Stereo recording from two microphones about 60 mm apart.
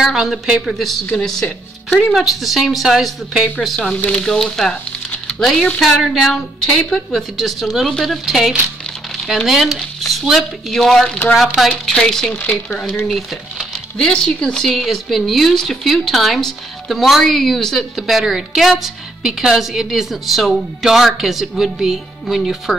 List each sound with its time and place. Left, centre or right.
0.0 s speech: centre
2.1 s a woman's voice: centre
4.1 s a woman's voice: centre
11.9 s speech: centre
13.9 s a woman's voice: centre